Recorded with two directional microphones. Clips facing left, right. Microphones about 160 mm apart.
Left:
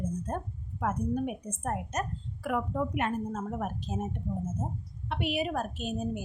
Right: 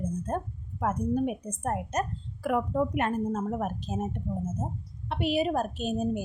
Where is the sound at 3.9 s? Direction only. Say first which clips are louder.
Right 2 dB; 50° right (ahead or behind).